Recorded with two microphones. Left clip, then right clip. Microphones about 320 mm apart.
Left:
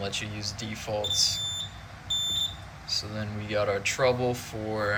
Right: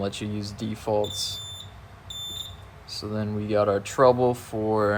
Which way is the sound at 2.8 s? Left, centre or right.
Centre.